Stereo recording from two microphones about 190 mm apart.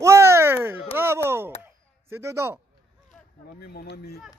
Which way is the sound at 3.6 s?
55° left (ahead or behind).